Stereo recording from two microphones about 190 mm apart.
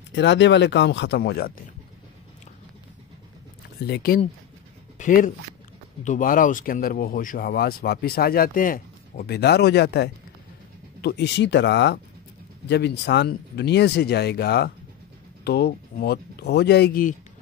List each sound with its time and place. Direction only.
0.1 s speech: 70° left (ahead or behind)
3.8 s speech: 55° left (ahead or behind)
4.9 s speech: 45° left (ahead or behind)